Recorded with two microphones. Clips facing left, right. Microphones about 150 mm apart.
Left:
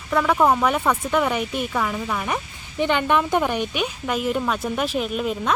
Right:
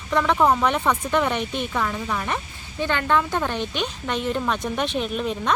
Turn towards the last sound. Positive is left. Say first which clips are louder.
# left 1 dB
turn(degrees=5)  # may be behind; listen again after turning